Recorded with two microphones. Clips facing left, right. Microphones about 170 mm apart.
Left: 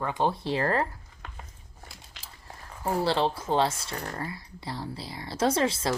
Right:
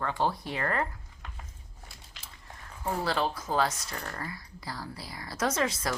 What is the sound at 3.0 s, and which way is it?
Speech, 30° left (ahead or behind).